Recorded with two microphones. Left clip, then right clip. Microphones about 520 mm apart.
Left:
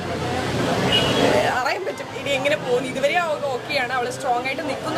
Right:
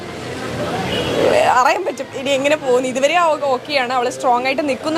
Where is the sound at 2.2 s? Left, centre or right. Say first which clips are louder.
Right 5 dB; right.